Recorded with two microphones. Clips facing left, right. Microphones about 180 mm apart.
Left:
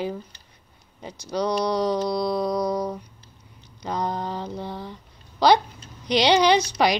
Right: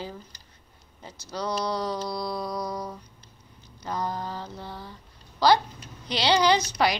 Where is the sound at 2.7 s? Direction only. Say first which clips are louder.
Left 8 dB; 40° left (ahead or behind).